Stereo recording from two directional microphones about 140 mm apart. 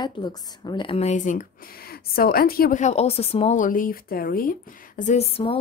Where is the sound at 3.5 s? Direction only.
75° left (ahead or behind).